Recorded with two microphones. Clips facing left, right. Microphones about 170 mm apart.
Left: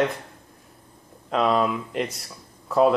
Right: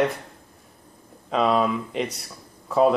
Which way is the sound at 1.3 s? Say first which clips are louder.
Even; centre (ahead or behind).